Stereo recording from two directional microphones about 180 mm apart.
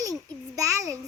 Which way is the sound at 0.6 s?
20° right (ahead or behind).